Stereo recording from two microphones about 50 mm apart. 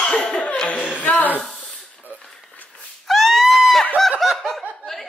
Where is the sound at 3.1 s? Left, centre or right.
Centre.